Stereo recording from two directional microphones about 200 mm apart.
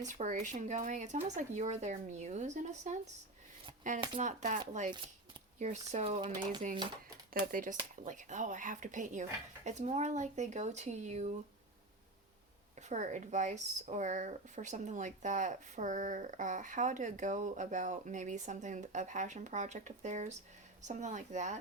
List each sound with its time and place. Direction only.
0.0 s speech: 40° right (ahead or behind); by 6.6 s 20° right (ahead or behind)
7.5 s speech: 45° right (ahead or behind)
12.9 s speech: 35° right (ahead or behind)